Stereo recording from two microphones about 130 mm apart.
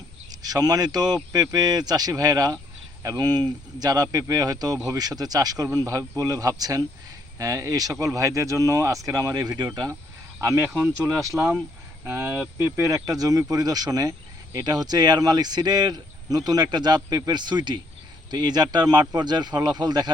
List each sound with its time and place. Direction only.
0.3 s speech: 30° right (ahead or behind)